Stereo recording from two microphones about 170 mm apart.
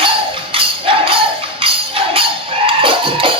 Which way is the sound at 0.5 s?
30° right (ahead or behind).